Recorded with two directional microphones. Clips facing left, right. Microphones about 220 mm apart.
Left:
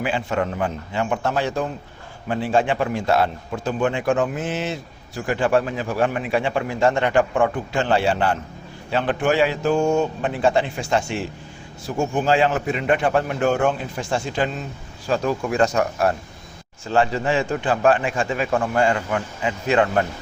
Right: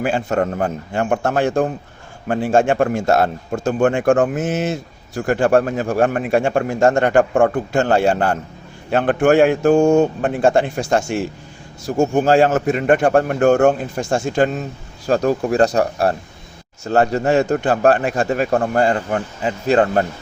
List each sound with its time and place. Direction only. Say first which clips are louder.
0.0 s a man's voice: right 4 dB; 45° right (ahead or behind)